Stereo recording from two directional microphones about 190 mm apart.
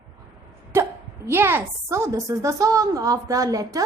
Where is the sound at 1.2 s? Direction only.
10° right (ahead or behind).